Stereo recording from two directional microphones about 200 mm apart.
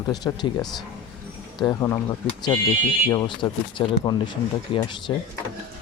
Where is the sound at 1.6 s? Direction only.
15° left (ahead or behind).